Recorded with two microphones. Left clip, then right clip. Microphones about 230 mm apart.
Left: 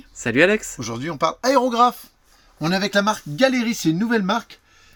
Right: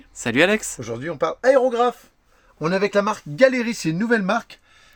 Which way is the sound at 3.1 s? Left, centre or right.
Right.